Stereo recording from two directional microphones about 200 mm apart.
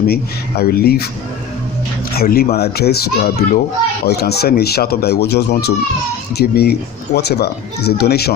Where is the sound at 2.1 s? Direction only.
50° left (ahead or behind).